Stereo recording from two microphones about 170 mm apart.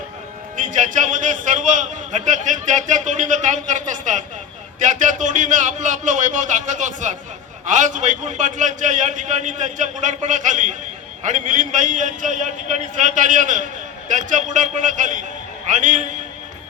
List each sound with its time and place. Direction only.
0.5 s a man's voice: 50° right (ahead or behind)